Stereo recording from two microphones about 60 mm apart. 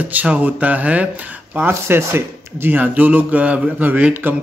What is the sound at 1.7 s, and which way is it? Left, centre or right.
Speech, right.